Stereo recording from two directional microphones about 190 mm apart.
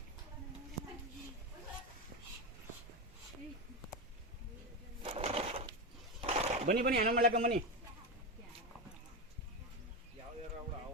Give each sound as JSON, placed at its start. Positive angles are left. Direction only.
{"t": 5.0, "sound": "crushing", "side_deg": -30}
{"t": 6.2, "sound": "a sound", "side_deg": -35}
{"t": 6.7, "sound": "speech", "side_deg": -50}